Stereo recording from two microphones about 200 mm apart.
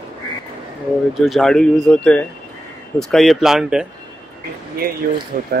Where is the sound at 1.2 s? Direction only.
Centre (ahead or behind).